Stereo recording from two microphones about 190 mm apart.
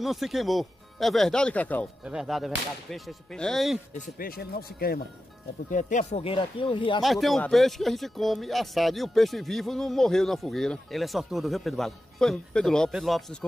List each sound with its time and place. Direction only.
0.0 s speech: centre (ahead or behind)
4.2 s speech: 50° left (ahead or behind)
5.7 s speech: 40° left (ahead or behind)
6.2 s speech: 25° left (ahead or behind)
7.0 s speech: centre (ahead or behind)